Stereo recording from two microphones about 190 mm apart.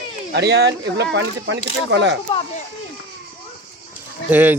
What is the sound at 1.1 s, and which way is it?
Speech, 70° right (ahead or behind).